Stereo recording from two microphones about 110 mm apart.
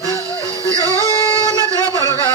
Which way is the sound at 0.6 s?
30° right (ahead or behind).